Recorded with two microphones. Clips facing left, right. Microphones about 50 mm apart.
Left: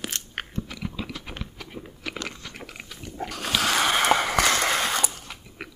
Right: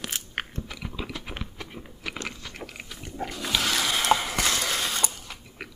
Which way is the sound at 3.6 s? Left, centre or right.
Left.